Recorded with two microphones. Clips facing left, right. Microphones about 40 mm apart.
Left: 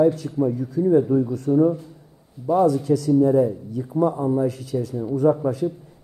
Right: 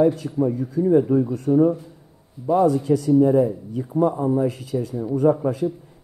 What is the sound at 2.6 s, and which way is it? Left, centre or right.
Speech, right.